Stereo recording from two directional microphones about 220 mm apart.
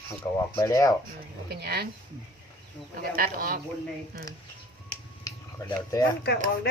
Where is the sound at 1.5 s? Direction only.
45° right (ahead or behind).